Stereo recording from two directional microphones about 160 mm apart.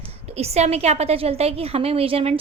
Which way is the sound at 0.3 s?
40° right (ahead or behind).